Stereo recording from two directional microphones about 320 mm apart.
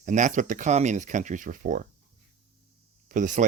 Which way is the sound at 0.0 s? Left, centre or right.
Right.